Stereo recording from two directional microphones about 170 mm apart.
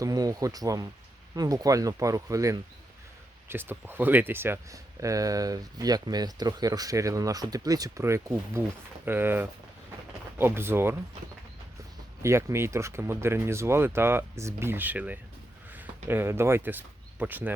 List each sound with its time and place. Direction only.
0.0 s speech: 20° right (ahead or behind)
12.2 s speech: 15° right (ahead or behind)